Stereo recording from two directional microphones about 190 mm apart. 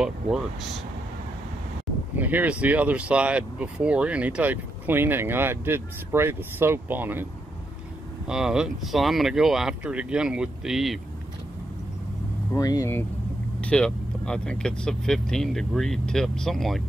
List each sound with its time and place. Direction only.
0.0 s speech: 5° right (ahead or behind)
2.1 s speech: 10° right (ahead or behind)
8.3 s speech: 5° right (ahead or behind)
12.5 s speech: 15° left (ahead or behind)
13.6 s speech: 5° left (ahead or behind)